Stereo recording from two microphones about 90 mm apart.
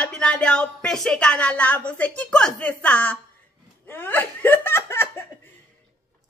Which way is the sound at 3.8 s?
20° left (ahead or behind).